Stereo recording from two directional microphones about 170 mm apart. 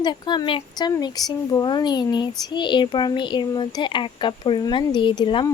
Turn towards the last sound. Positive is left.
turn(degrees=25)  # may be behind; listen again after turning